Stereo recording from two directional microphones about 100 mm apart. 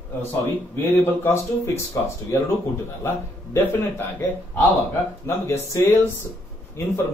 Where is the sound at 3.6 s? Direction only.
25° left (ahead or behind).